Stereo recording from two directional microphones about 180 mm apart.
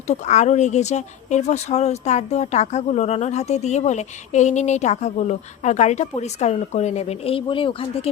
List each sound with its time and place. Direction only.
0.1 s speech: 40° left (ahead or behind)